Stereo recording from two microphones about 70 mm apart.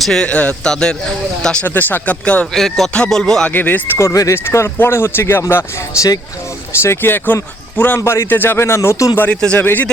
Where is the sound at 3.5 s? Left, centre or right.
Left.